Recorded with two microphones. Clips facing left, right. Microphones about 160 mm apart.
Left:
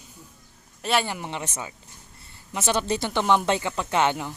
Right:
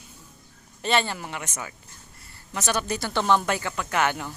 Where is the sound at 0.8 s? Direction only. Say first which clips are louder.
Even; 5° left (ahead or behind).